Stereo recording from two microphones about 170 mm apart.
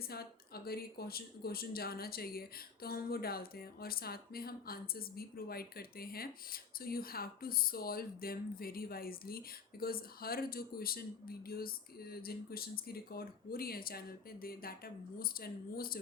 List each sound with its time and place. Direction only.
0.1 s speech: 65° left (ahead or behind)